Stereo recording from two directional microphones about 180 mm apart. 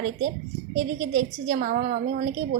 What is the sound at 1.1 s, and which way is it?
A woman's voice, 50° right (ahead or behind).